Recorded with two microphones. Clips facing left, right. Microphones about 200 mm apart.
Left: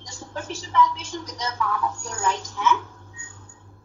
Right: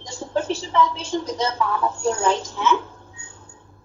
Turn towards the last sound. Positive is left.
turn(degrees=-25)  # may be behind; listen again after turning